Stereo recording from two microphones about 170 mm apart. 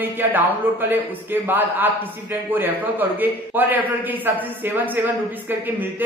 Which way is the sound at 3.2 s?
10° right (ahead or behind).